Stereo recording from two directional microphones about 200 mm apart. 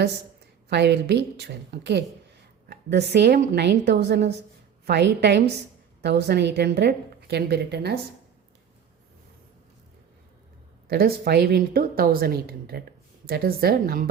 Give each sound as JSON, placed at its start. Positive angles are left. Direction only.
{"t": 0.7, "sound": "a woman's voice", "side_deg": -55}
{"t": 10.8, "sound": "a woman's voice", "side_deg": -50}